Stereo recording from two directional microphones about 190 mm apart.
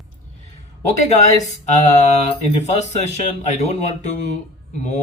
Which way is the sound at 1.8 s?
40° left (ahead or behind).